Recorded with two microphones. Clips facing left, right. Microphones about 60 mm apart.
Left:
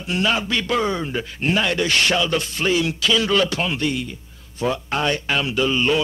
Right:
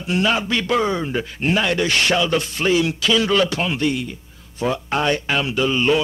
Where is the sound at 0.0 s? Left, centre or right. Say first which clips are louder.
Right 2 dB; centre.